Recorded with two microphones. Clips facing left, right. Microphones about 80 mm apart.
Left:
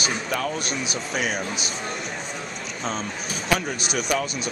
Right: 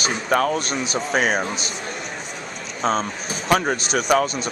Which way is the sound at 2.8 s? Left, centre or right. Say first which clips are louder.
Right 8 dB; right.